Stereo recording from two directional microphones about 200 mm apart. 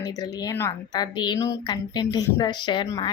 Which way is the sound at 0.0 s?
20° left (ahead or behind).